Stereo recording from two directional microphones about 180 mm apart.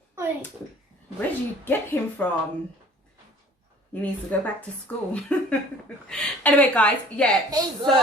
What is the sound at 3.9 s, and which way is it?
A woman's voice, 10° left (ahead or behind).